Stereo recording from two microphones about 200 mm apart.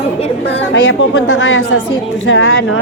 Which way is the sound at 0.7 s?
90° left.